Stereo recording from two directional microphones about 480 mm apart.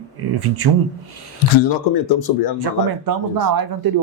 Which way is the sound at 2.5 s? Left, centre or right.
Right.